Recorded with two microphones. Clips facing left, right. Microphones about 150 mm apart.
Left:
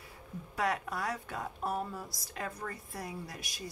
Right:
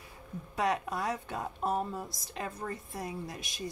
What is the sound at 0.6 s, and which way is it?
Speech, 20° right (ahead or behind).